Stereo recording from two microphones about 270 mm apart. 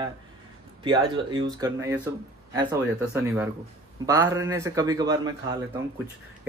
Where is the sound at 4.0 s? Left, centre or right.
Centre.